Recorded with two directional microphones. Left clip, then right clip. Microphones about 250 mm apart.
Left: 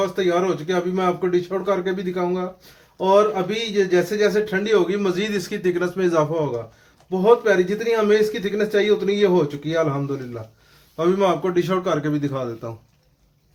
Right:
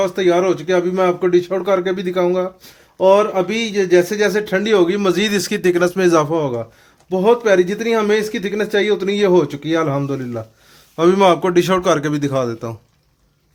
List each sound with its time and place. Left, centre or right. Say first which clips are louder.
0.0 s a man's voice: right 5 dB; right